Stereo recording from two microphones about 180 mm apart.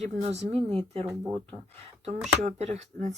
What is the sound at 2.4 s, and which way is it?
Speech, 40° right (ahead or behind).